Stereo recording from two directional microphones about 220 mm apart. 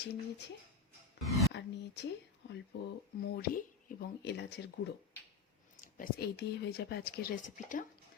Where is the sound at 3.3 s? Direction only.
45° left (ahead or behind).